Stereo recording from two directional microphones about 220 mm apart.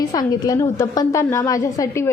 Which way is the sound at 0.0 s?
15° left (ahead or behind).